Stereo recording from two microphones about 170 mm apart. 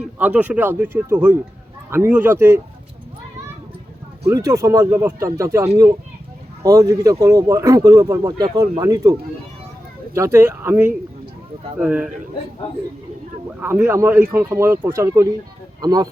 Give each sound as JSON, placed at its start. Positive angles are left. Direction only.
{"t": 0.0, "sound": "speech", "side_deg": -10}
{"t": 4.3, "sound": "speech", "side_deg": -20}
{"t": 10.2, "sound": "speech", "side_deg": -15}
{"t": 13.6, "sound": "speech", "side_deg": -15}